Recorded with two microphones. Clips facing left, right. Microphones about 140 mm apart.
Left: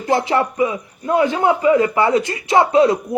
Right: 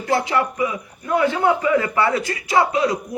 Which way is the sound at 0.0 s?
25° left (ahead or behind).